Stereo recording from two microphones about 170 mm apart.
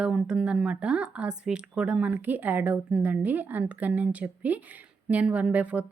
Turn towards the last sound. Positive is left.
turn(degrees=-10)  # may be behind; listen again after turning